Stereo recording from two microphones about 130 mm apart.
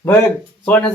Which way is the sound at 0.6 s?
10° left (ahead or behind).